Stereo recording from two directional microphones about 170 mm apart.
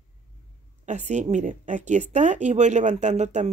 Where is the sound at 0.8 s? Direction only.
45° right (ahead or behind).